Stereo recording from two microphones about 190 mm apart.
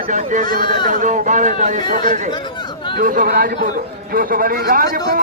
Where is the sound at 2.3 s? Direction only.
25° left (ahead or behind).